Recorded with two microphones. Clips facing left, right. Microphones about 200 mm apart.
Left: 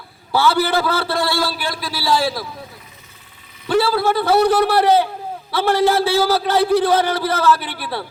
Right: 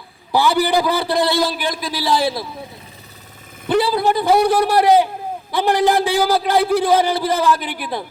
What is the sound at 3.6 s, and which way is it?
A man's voice, 20° right (ahead or behind).